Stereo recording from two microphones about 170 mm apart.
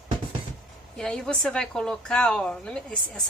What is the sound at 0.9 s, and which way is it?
A woman's voice, 5° left (ahead or behind).